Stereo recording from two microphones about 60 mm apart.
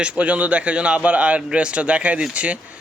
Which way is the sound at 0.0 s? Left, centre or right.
Right.